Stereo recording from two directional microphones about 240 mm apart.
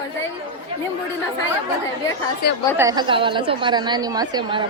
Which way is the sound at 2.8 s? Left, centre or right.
Centre.